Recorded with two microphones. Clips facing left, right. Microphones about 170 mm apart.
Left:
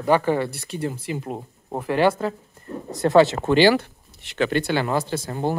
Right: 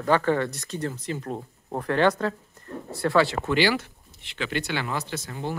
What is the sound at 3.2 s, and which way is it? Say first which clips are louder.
Speech: left 7 dB; 25° left (ahead or behind).